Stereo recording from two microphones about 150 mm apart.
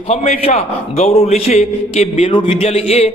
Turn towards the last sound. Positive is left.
turn(degrees=45)  # may be behind; listen again after turning